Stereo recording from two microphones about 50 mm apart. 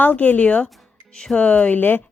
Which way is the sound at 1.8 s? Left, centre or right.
Left.